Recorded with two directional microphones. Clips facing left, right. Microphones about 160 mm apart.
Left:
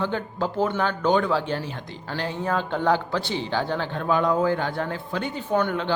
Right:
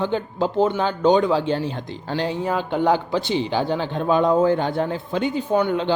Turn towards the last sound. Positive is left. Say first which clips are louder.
# right 4 dB
turn(degrees=-20)  # may be behind; listen again after turning